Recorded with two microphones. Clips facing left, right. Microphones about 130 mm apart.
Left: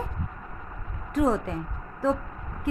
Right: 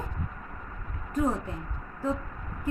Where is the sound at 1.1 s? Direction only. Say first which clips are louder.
Left 4 dB; 90° left.